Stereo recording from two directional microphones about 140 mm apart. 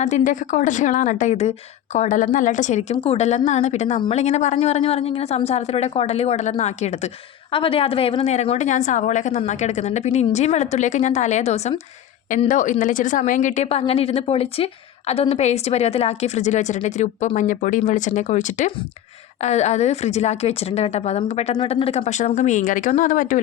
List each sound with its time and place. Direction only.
0.3 s a woman's voice: 65° left (ahead or behind)
2.9 s speech: 40° left (ahead or behind)
7.5 s a woman's voice: 40° left (ahead or behind)
12.5 s a woman's voice: 65° left (ahead or behind)
21.5 s a woman's voice: 40° left (ahead or behind); by 23.4 s 70° left (ahead or behind)